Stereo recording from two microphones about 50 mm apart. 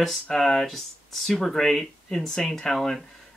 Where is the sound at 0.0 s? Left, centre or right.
Centre.